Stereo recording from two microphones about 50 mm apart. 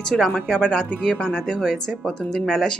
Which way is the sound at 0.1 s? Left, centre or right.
Centre.